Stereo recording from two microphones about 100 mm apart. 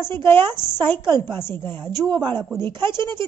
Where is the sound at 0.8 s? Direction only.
50° right (ahead or behind).